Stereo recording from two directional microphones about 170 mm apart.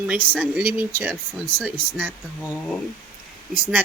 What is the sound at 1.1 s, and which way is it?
Speech, 5° left (ahead or behind).